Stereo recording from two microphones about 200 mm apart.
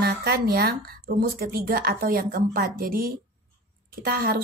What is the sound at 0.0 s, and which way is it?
A woman's voice, 50° right (ahead or behind).